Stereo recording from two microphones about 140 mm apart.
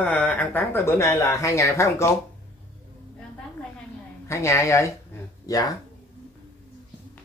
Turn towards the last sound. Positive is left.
turn(degrees=25)  # may be behind; listen again after turning